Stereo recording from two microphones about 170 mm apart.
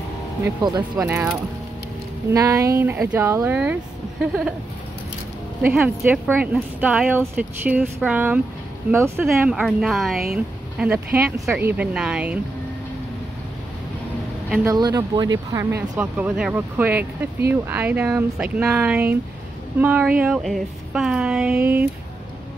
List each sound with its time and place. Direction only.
0.6 s speech: 25° right (ahead or behind)
0.9 s speech: 10° right (ahead or behind)
2.3 s a woman's voice: 20° right (ahead or behind)
5.6 s speech: 5° right (ahead or behind)
9.2 s a woman's voice: 5° right (ahead or behind)
14.6 s speech: 20° right (ahead or behind)